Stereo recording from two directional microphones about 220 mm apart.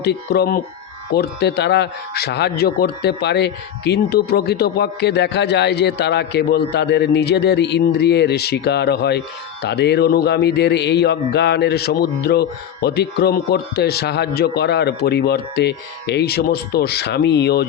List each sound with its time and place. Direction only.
0.0 s speech: 45° left (ahead or behind)